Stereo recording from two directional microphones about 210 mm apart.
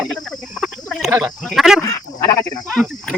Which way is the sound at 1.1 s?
5° right (ahead or behind).